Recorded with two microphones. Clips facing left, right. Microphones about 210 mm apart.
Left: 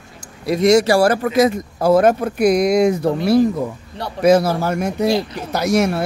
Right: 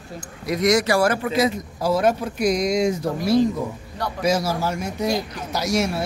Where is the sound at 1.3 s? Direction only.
50° left (ahead or behind).